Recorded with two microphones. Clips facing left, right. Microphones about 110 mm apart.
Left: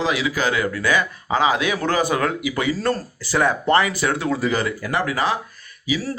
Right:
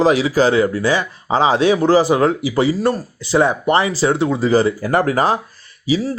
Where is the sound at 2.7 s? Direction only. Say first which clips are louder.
Right 4 dB; 15° right (ahead or behind); by 5.4 s 40° right (ahead or behind).